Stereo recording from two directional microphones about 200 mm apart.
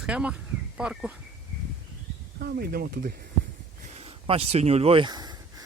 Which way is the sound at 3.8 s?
30° right (ahead or behind).